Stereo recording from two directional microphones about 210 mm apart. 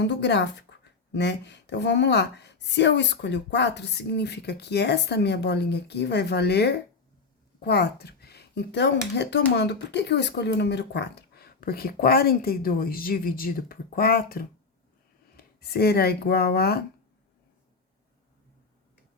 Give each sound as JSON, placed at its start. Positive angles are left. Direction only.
{"t": 0.0, "sound": "a woman's voice", "side_deg": 55}